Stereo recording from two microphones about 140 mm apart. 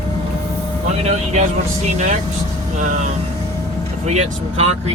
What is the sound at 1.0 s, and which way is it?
Speech, 55° right (ahead or behind).